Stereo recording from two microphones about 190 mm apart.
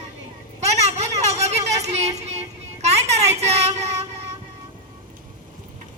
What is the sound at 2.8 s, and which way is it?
Child singing, 35° right (ahead or behind).